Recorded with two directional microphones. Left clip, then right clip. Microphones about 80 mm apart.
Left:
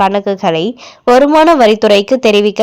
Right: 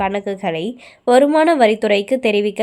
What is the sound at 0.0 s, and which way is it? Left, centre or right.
A woman's voice, left.